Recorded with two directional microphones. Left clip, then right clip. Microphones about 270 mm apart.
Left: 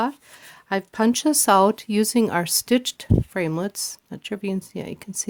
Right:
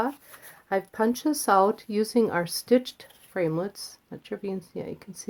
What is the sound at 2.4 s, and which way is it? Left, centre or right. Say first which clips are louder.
Speech: left 2 dB; left.